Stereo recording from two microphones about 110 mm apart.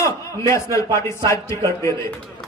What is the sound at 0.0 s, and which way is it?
A man's voice, 25° left (ahead or behind).